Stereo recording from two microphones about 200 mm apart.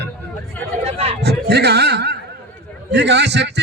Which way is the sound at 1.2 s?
55° right (ahead or behind).